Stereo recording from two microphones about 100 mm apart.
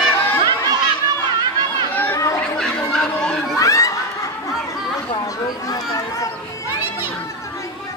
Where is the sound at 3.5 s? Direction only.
30° left (ahead or behind).